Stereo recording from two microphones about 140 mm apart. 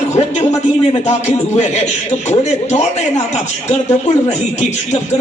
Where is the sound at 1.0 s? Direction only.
55° left (ahead or behind).